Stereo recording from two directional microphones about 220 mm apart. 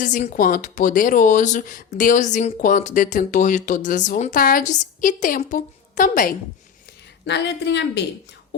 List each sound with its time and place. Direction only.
0.0 s speech: 35° left (ahead or behind)
7.3 s speech: 50° left (ahead or behind)